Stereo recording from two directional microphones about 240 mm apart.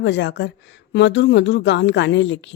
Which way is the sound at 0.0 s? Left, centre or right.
Left.